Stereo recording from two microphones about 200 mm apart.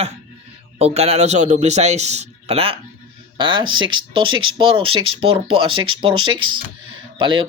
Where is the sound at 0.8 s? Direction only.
30° right (ahead or behind).